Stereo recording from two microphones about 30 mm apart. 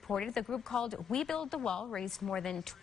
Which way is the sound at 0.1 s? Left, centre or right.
Centre.